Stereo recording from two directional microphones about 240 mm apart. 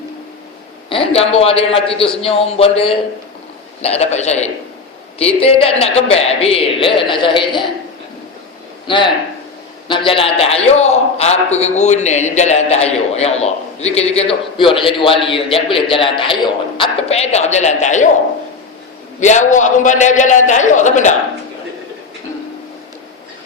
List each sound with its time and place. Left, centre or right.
0.9 s a man's voice: left
8.9 s a man's voice: centre
19.2 s a man's voice: left